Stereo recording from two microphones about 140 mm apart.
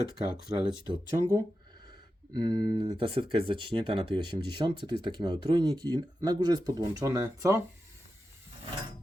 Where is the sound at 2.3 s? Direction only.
30° right (ahead or behind).